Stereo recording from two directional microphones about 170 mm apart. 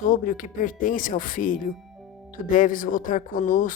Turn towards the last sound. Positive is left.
turn(degrees=50)  # may be behind; listen again after turning